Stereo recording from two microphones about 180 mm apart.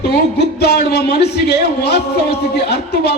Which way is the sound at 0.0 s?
65° left (ahead or behind).